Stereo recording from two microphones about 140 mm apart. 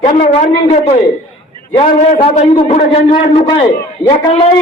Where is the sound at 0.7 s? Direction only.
50° left (ahead or behind).